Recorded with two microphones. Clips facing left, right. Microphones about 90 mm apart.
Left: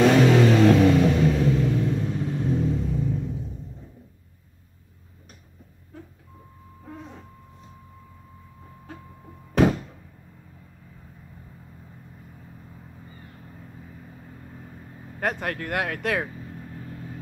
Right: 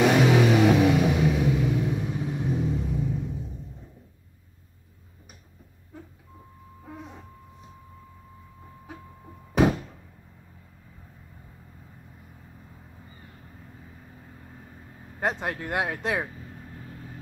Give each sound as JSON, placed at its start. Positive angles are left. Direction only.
{"t": 0.0, "sound": "music", "side_deg": -10}
{"t": 6.8, "sound": "a sound", "side_deg": -5}
{"t": 9.5, "sound": "thunk", "side_deg": -10}
{"t": 15.1, "sound": "speech", "side_deg": -20}